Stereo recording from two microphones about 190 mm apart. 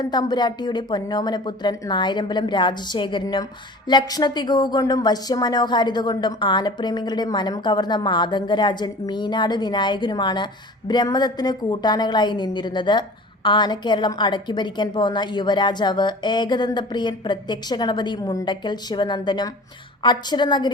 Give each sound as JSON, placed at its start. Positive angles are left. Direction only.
{"t": 0.0, "sound": "speech", "side_deg": 20}